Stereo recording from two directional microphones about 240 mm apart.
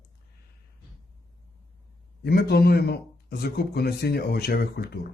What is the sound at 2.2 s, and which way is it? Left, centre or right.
Speech, left.